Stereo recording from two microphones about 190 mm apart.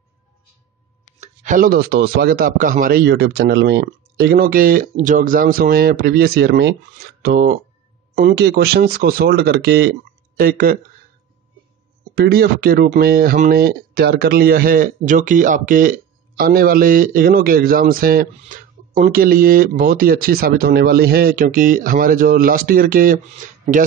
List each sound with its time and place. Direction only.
1.2 s a man's voice: 40° right (ahead or behind)
12.2 s a man's voice: 55° right (ahead or behind)